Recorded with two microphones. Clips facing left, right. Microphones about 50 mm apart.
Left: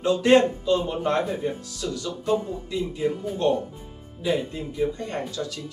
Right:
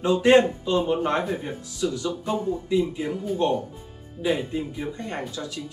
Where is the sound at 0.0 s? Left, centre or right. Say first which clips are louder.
Right 1 dB; centre.